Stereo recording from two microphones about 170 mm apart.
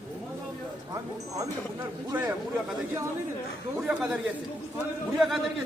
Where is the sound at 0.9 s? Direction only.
15° right (ahead or behind).